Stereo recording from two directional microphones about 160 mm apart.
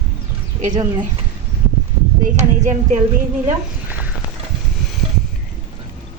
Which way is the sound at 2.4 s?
50° right (ahead or behind).